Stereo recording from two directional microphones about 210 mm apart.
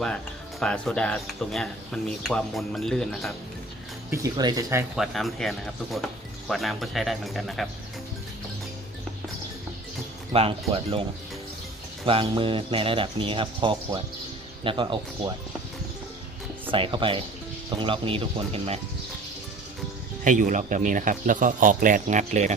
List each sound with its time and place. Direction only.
0.6 s speech: 5° left (ahead or behind)
4.1 s speech: 15° right (ahead or behind)
4.9 s speech: centre (ahead or behind)
10.3 s speech: 25° right (ahead or behind)
12.0 s speech: 25° right (ahead or behind)
16.7 s speech: 25° right (ahead or behind)
20.2 s speech: 35° right (ahead or behind)